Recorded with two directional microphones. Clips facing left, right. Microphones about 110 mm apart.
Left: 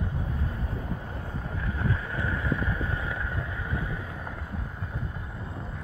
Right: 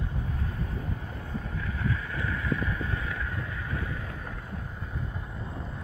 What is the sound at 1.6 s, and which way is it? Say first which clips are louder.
Boat: left 2 dB; 30° left (ahead or behind).